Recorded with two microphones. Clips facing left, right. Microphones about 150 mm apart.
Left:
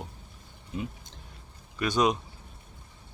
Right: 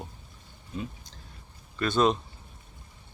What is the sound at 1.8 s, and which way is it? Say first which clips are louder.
Speech: right 1 dB; 10° left (ahead or behind).